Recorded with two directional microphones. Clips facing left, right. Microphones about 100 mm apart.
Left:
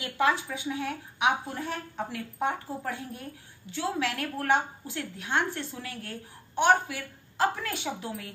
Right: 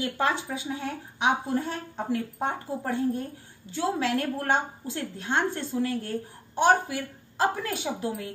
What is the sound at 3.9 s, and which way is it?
A woman's voice, 30° right (ahead or behind).